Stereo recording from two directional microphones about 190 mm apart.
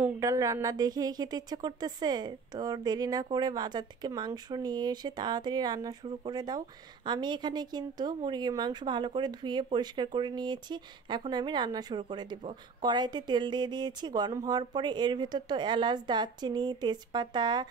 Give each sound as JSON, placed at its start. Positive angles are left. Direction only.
{"t": 0.0, "sound": "speech", "side_deg": -15}